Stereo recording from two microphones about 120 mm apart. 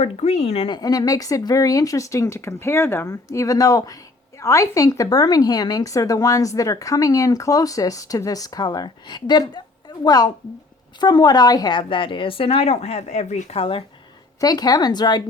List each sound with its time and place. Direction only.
0.0 s speech: 60° left (ahead or behind)
0.7 s a woman's voice: 30° left (ahead or behind); by 13.6 s 70° left (ahead or behind)
13.6 s a woman's voice: 50° left (ahead or behind)
14.4 s speech: 35° left (ahead or behind)